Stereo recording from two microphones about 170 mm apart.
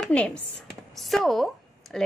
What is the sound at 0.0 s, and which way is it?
A woman's voice, 5° left (ahead or behind).